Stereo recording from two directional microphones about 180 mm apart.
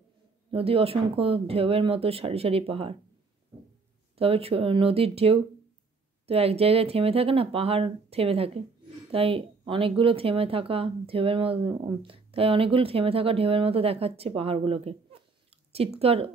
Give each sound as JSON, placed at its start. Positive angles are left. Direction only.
{"t": 0.5, "sound": "speech", "side_deg": -30}
{"t": 4.2, "sound": "speech", "side_deg": -30}